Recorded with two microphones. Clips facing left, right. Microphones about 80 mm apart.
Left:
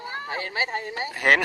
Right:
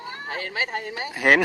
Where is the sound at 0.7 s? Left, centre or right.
Left.